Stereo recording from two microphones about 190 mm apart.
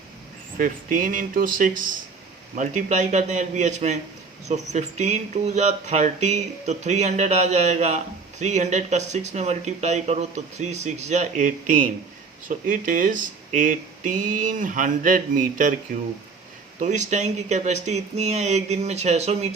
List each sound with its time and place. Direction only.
0.6 s speech: 45° right (ahead or behind)
16.8 s speech: 40° right (ahead or behind)